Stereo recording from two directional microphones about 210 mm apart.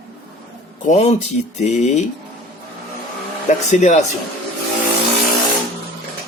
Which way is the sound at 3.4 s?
35° left (ahead or behind).